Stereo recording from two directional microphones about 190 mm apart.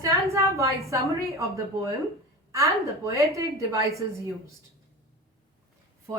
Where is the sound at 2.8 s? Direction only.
15° right (ahead or behind).